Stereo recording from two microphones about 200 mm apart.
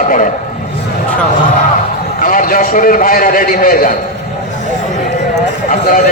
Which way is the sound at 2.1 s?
45° left (ahead or behind).